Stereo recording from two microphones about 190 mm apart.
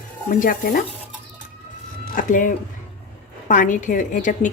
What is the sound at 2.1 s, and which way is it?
A woman's voice, 45° left (ahead or behind).